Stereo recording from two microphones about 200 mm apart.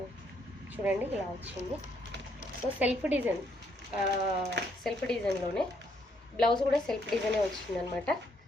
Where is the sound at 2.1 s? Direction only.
60° right (ahead or behind).